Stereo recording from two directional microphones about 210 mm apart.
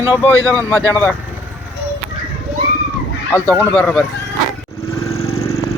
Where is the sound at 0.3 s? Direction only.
10° left (ahead or behind).